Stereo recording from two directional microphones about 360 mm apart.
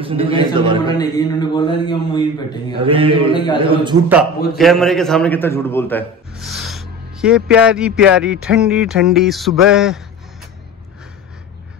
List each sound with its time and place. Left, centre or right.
0.0 s a man's voice: centre
0.9 s a man's voice: centre
2.8 s a man's voice: centre